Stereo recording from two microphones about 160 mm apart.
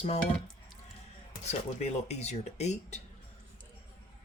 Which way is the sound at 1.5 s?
45° left (ahead or behind).